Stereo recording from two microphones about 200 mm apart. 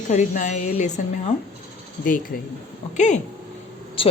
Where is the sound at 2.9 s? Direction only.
35° left (ahead or behind).